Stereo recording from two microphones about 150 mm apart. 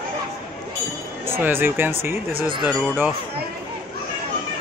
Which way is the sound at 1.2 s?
15° right (ahead or behind).